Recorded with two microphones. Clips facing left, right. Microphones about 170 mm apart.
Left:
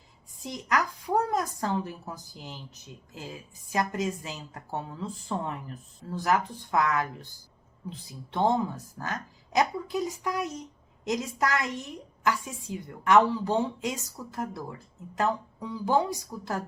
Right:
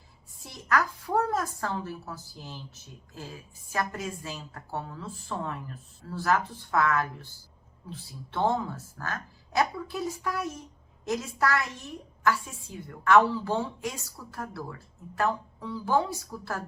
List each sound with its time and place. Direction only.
0.4 s a woman's voice: 15° left (ahead or behind)